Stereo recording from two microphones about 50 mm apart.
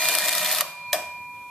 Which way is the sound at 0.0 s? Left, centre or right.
Centre.